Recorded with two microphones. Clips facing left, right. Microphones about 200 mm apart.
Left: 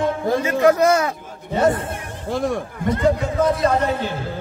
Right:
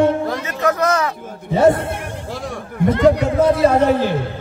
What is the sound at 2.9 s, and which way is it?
Speech, 75° right (ahead or behind).